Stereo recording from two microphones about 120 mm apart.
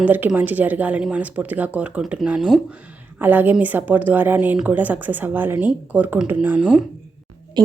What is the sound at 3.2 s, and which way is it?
A woman's voice, 15° right (ahead or behind).